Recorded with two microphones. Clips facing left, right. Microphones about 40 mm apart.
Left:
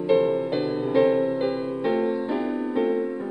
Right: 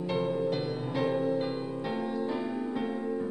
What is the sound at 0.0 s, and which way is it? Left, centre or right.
Music, centre.